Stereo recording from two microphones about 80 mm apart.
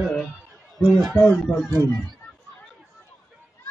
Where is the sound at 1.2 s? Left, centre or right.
Centre.